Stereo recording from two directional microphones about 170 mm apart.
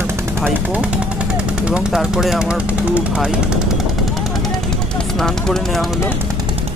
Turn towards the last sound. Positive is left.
turn(degrees=0)  # may be behind; listen again after turning